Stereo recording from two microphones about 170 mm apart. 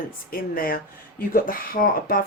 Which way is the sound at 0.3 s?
55° left (ahead or behind).